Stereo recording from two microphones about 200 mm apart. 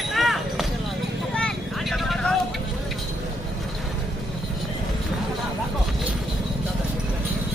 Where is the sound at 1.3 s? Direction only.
Centre (ahead or behind).